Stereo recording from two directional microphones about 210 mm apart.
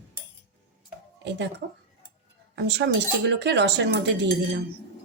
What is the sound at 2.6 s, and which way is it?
A woman's voice, 55° right (ahead or behind).